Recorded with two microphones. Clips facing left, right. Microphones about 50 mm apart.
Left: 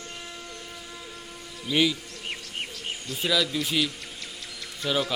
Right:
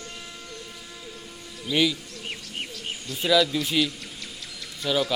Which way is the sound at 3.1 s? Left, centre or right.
Centre.